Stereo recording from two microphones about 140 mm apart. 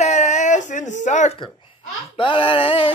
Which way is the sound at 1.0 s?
60° left (ahead or behind).